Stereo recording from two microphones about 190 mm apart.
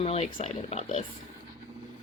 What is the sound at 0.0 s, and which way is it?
Speech, 30° left (ahead or behind).